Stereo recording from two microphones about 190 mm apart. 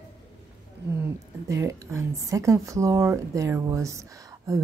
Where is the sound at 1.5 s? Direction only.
15° right (ahead or behind).